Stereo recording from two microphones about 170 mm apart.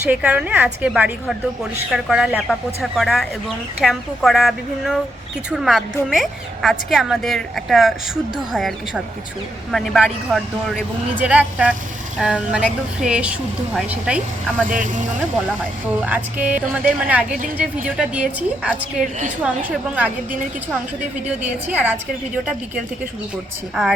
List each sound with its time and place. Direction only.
0.0 s a woman's voice: 10° right (ahead or behind)
14.7 s speech: 50° right (ahead or behind)
16.0 s a woman's voice: 10° right (ahead or behind)
21.2 s a woman's voice: 10° right (ahead or behind)